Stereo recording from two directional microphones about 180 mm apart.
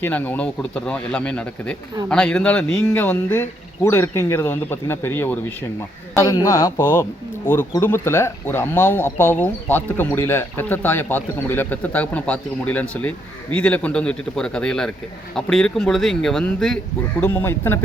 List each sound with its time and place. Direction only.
0.0 s speech: 10° left (ahead or behind)